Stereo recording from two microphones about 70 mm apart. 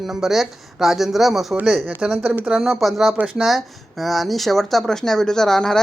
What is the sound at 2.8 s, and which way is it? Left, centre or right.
Speech, centre.